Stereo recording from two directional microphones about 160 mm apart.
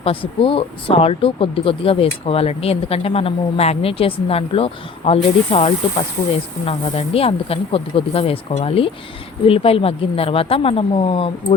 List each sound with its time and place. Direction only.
0.0 s speech: 35° left (ahead or behind)